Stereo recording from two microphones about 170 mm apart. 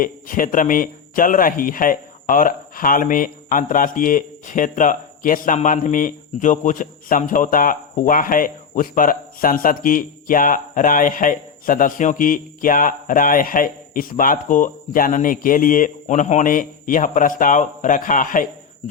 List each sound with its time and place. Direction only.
0.0 s speech: 55° left (ahead or behind)